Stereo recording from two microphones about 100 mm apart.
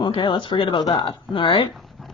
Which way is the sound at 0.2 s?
55° left (ahead or behind).